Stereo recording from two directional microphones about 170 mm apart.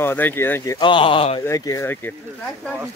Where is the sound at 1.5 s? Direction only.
20° left (ahead or behind).